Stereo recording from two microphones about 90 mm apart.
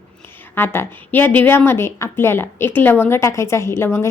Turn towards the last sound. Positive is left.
turn(degrees=30)  # may be behind; listen again after turning